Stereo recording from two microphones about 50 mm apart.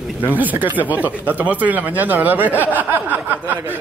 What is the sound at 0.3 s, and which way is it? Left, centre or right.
Speech, right.